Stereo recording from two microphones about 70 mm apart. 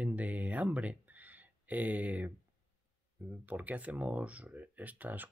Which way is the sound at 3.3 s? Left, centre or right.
Right.